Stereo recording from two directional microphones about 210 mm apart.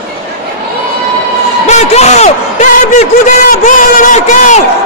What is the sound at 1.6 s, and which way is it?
A man's voice, 30° left (ahead or behind).